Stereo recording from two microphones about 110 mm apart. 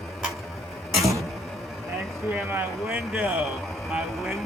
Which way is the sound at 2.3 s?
15° right (ahead or behind).